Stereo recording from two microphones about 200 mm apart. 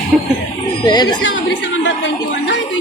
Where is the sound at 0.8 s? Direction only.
20° left (ahead or behind).